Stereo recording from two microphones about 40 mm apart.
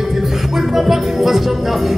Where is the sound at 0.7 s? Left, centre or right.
Centre.